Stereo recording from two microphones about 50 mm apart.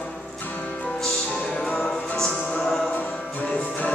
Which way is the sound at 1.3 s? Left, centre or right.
Centre.